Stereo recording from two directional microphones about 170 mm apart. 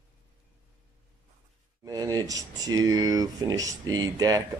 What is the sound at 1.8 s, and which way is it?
Speech, 20° right (ahead or behind).